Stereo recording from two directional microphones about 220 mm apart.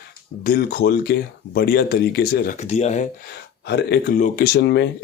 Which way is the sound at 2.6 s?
30° left (ahead or behind).